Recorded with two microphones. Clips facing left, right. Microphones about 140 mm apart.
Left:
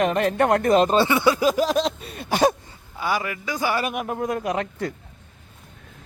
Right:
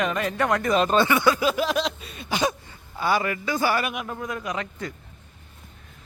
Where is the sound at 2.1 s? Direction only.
55° left (ahead or behind).